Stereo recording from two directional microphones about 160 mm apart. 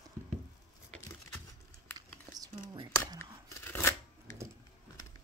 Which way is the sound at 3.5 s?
15° left (ahead or behind).